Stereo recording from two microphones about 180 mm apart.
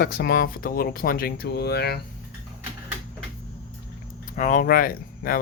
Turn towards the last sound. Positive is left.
turn(degrees=50)  # may be behind; listen again after turning